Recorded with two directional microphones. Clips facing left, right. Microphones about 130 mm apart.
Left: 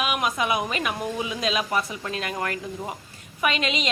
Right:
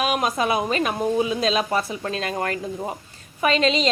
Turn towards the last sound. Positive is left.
turn(degrees=-35)  # may be behind; listen again after turning